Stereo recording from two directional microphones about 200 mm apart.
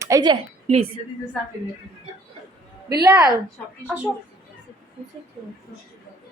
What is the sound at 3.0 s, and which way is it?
A woman's voice, 20° right (ahead or behind).